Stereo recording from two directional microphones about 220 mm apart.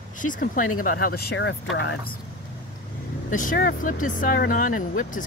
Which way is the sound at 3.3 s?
40° left (ahead or behind).